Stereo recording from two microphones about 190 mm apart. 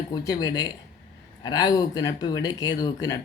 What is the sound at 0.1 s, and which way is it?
Speech, 20° left (ahead or behind).